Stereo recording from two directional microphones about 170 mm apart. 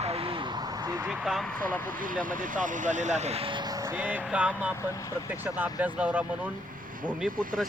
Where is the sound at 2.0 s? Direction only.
55° right (ahead or behind); by 3.8 s 30° right (ahead or behind).